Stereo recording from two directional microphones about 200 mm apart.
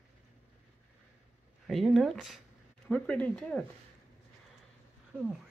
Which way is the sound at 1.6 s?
Centre (ahead or behind).